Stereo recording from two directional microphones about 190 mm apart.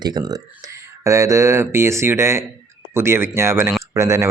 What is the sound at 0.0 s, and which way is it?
Speech, 20° right (ahead or behind).